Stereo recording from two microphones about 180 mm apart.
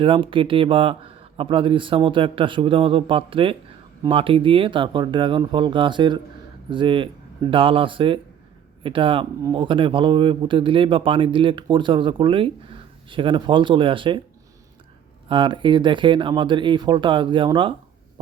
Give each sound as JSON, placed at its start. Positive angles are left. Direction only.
{"t": 0.0, "sound": "speech", "side_deg": -30}
{"t": 15.3, "sound": "speech", "side_deg": -25}